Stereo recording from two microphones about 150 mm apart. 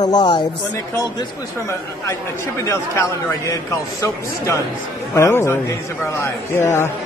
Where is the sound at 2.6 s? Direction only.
20° left (ahead or behind).